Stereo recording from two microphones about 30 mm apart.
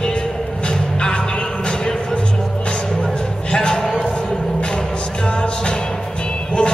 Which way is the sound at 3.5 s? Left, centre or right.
Centre.